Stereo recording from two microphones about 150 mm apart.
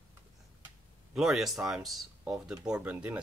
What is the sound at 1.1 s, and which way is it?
Speech, centre (ahead or behind).